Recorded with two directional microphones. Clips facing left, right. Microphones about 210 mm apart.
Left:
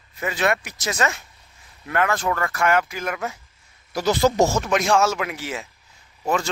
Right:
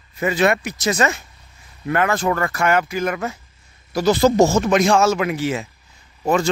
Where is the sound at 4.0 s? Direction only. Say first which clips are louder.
Right 4 dB; 10° right (ahead or behind).